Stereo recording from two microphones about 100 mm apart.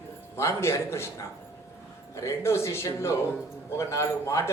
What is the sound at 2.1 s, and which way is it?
A man's voice, 30° left (ahead or behind).